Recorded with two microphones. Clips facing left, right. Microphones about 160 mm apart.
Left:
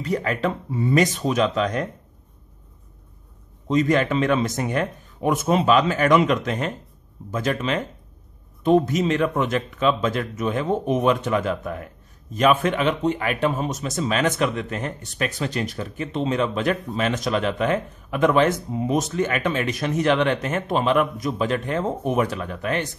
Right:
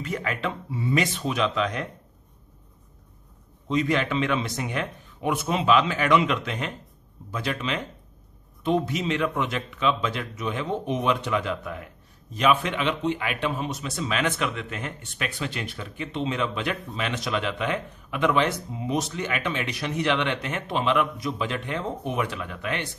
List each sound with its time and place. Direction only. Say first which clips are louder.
0.0 s a man's voice: left 6 dB; 40° left (ahead or behind)
3.6 s a man's voice: left 5 dB; 45° left (ahead or behind)